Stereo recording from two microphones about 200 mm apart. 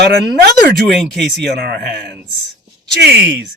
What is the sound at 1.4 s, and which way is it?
Speech, 55° right (ahead or behind).